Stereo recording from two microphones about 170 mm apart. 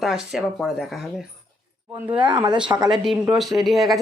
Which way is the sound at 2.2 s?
25° right (ahead or behind).